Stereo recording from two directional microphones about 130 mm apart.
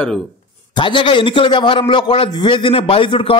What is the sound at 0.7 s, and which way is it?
A man's voice, 40° left (ahead or behind).